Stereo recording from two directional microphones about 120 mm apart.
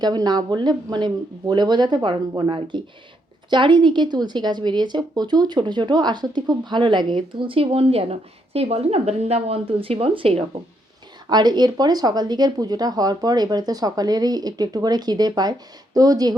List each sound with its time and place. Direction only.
0.0 s speech: 35° right (ahead or behind); by 10.6 s 50° right (ahead or behind)
11.3 s speech: 35° right (ahead or behind)